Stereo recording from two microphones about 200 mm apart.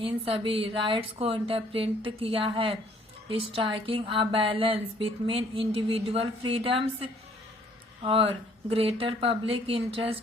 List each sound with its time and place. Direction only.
0.0 s speech: 25° right (ahead or behind)